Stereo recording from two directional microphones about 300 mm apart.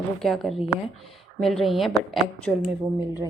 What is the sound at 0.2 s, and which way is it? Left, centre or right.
A woman's voice, centre.